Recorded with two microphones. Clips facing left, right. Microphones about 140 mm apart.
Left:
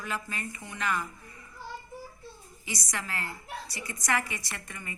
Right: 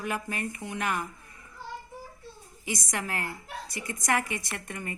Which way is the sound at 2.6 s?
50° right (ahead or behind).